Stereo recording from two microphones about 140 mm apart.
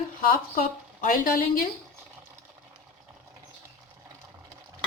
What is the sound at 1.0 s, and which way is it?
Speech, 90° left.